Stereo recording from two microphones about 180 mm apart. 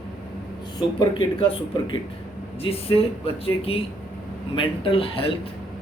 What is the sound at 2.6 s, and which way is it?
Speech, 30° left (ahead or behind).